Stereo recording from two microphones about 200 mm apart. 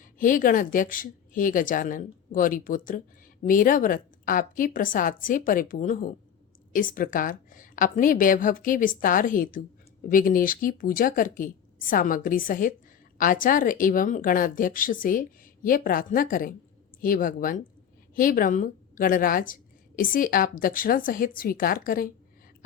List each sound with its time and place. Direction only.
0.0 s a woman's voice: 40° left (ahead or behind)